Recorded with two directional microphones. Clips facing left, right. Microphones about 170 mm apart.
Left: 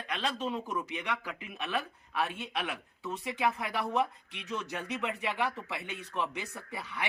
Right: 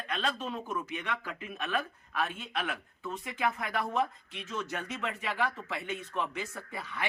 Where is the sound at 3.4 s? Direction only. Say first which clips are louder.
Even; 20° left (ahead or behind).